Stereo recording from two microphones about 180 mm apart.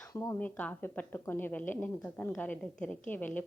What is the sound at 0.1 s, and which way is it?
A woman's voice, 15° left (ahead or behind).